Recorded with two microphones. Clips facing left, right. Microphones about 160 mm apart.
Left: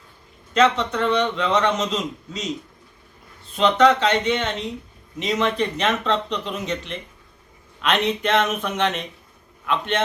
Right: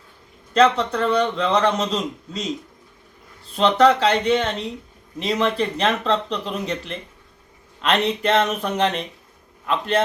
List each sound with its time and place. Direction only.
0.5 s a man's voice: 35° right (ahead or behind)
3.5 s a man's voice: 35° right (ahead or behind)